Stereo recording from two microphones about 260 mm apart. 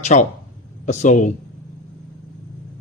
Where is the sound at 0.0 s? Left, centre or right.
Left.